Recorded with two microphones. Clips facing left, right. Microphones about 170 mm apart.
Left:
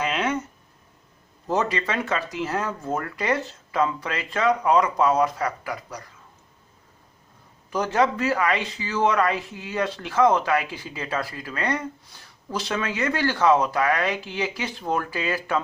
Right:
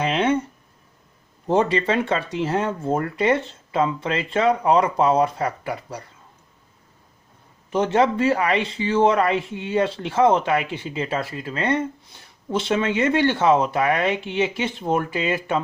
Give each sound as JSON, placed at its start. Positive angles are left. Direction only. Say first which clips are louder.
{"t": 0.0, "sound": "a sound", "louder": "right 5 dB", "side_deg": -30}
{"t": 1.5, "sound": "speech", "louder": "right 5 dB", "side_deg": -30}
{"t": 7.7, "sound": "speech", "louder": "right 3 dB", "side_deg": -25}